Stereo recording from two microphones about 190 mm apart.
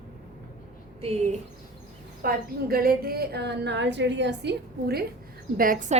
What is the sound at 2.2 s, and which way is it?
A woman's voice, 50° right (ahead or behind).